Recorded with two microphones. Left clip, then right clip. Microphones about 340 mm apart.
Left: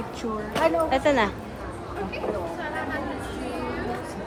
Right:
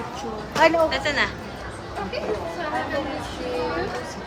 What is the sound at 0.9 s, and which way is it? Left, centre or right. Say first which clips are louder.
Speech: left 1 dB; centre.